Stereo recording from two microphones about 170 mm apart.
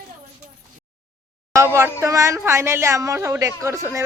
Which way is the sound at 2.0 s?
15° right (ahead or behind).